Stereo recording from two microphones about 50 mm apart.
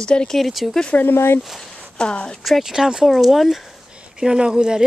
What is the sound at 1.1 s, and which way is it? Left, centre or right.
Speech, left.